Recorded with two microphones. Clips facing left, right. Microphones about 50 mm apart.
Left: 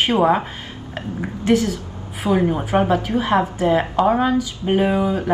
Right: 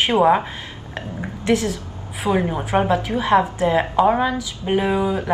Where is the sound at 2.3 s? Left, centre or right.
Centre.